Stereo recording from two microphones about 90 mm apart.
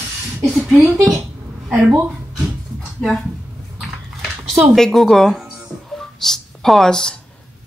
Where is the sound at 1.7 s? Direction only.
20° right (ahead or behind).